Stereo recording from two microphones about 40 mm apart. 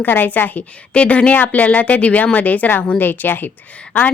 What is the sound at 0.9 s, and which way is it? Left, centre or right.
Speech, left.